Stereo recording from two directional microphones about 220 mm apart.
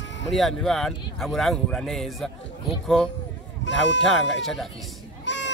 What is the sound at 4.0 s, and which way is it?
Speech, centre (ahead or behind).